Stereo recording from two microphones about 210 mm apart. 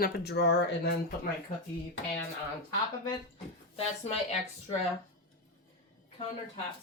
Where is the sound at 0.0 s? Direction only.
50° left (ahead or behind).